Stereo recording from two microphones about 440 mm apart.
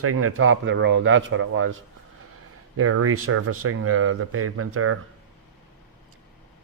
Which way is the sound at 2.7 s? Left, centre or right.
Right.